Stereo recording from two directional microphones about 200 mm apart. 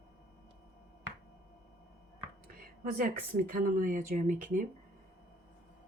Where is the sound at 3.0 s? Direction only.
45° right (ahead or behind).